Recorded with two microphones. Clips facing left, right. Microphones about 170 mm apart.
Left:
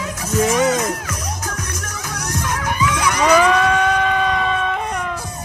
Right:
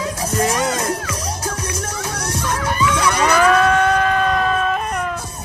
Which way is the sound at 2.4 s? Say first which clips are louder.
Right 1 dB; 10° left (ahead or behind).